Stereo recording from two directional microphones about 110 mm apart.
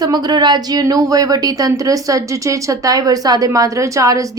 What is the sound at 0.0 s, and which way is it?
A woman's voice, 40° right (ahead or behind).